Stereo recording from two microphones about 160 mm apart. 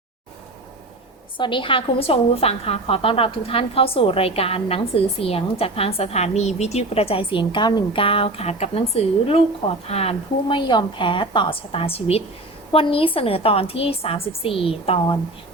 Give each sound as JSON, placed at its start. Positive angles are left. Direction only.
{"t": 1.4, "sound": "a woman's voice", "side_deg": 30}